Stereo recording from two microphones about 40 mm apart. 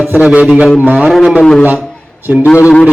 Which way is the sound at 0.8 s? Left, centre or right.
Right.